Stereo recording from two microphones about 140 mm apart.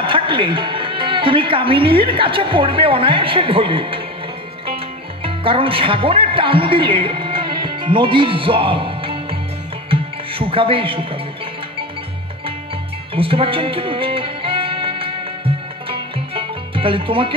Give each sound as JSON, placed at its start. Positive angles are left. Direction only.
{"t": 0.0, "sound": "speech", "side_deg": -40}
{"t": 5.2, "sound": "speech", "side_deg": -40}
{"t": 9.8, "sound": "music", "side_deg": -40}
{"t": 13.1, "sound": "music", "side_deg": -40}